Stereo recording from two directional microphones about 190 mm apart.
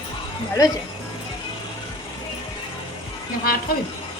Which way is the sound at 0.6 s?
15° left (ahead or behind).